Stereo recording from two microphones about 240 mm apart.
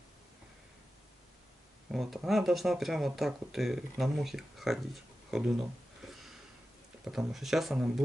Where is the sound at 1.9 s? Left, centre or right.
Centre.